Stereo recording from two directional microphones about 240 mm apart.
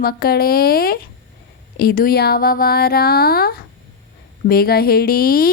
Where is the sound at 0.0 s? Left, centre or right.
Left.